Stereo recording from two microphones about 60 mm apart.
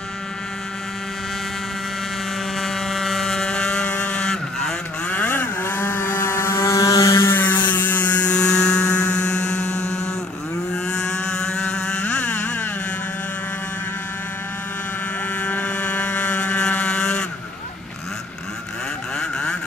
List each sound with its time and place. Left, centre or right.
2.6 s vehicle: centre
5.1 s vehicle: left
6.8 s a sound: left
7.2 s mains hum: left; by 9.9 s centre
10.7 s vehicle: centre
15.4 s vehicle: left